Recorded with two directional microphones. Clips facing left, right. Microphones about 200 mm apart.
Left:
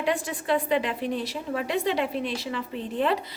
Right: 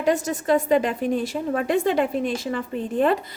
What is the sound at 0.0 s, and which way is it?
A woman's voice, 45° right (ahead or behind).